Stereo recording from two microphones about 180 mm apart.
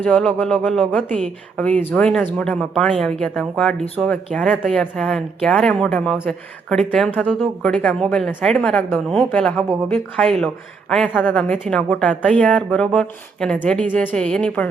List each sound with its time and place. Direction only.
0.0 s speech: 5° left (ahead or behind)